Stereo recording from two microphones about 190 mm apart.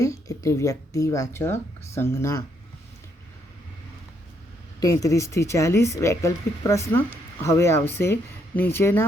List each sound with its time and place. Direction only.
0.0 s speech: 15° left (ahead or behind)
4.8 s speech: 15° left (ahead or behind)